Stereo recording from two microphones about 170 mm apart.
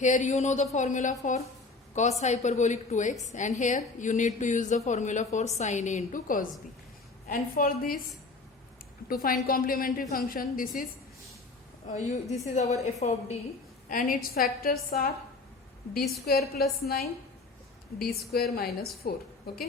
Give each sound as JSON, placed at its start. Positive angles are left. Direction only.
{"t": 0.0, "sound": "a woman's voice", "side_deg": 45}
{"t": 9.0, "sound": "a woman's voice", "side_deg": 55}
{"t": 11.9, "sound": "a woman's voice", "side_deg": 45}
{"t": 13.8, "sound": "a woman's voice", "side_deg": 55}
{"t": 16.2, "sound": "a woman's voice", "side_deg": 65}